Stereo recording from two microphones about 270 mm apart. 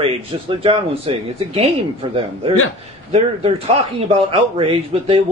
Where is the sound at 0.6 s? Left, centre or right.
Right.